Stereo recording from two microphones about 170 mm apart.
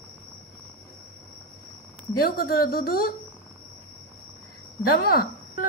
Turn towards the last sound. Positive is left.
turn(degrees=65)  # may be behind; listen again after turning